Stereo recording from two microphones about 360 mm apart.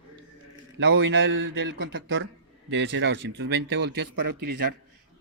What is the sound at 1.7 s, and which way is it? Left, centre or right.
Speech, right.